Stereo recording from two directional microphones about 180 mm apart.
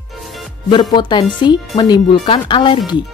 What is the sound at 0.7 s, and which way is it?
Speech, 25° left (ahead or behind).